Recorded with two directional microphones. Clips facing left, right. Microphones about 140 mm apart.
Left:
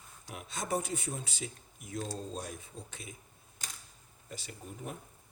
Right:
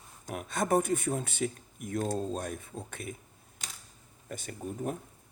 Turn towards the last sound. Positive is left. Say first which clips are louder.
# right 8 dB
turn(degrees=-50)  # may be behind; listen again after turning